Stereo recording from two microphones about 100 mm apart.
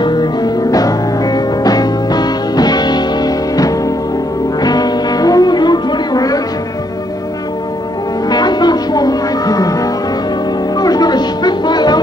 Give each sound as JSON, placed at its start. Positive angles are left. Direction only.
{"t": 0.0, "sound": "music", "side_deg": 45}
{"t": 8.3, "sound": "music", "side_deg": 45}